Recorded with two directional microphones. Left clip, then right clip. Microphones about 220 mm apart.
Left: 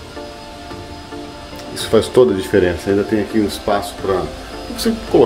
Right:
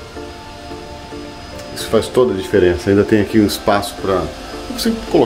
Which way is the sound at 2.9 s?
30° right (ahead or behind).